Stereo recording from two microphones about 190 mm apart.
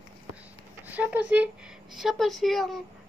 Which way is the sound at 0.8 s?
10° right (ahead or behind).